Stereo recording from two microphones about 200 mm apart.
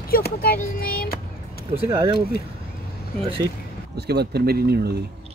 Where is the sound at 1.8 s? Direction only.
20° right (ahead or behind).